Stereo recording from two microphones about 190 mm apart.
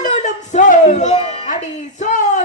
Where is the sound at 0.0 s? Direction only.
40° left (ahead or behind).